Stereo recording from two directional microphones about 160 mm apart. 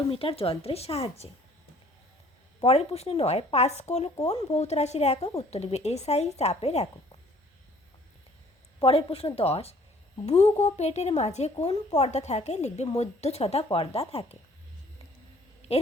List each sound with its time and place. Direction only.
0.1 s a woman's voice: 35° left (ahead or behind)
2.6 s a woman's voice: 40° left (ahead or behind)
8.8 s a woman's voice: 35° left (ahead or behind)